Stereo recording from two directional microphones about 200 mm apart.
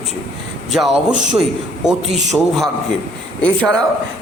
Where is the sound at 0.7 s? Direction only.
5° right (ahead or behind).